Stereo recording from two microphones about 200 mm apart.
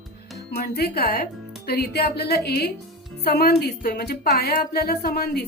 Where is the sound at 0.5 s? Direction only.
50° left (ahead or behind).